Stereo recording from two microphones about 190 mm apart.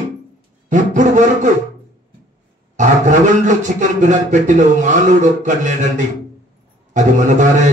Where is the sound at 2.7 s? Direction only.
40° right (ahead or behind).